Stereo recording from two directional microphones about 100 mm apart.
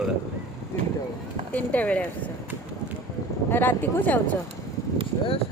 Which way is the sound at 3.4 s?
20° left (ahead or behind).